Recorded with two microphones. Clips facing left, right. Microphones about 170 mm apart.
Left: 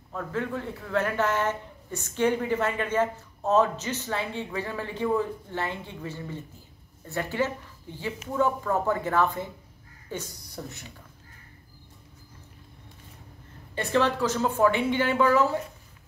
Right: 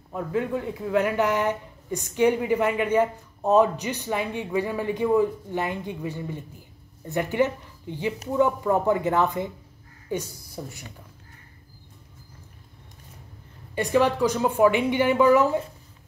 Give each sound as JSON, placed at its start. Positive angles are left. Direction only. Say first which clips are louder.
{"t": 0.1, "sound": "speech", "louder": "right 4 dB", "side_deg": -15}
{"t": 13.7, "sound": "speech", "louder": "right 3 dB", "side_deg": -10}